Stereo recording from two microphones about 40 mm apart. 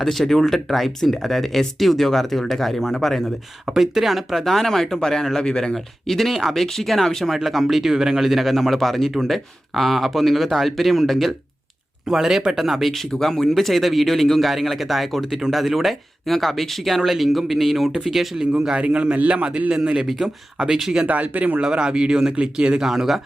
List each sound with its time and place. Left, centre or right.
0.0 s speech: centre
5.7 s speech: centre
12.0 s speech: centre
13.1 s speech: centre
18.8 s speech: right
20.1 s speech: centre
21.1 s speech: right
21.6 s speech: right
22.9 s speech: centre